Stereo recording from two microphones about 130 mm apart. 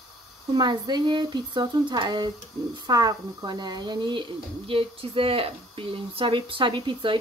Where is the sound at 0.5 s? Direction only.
35° right (ahead or behind).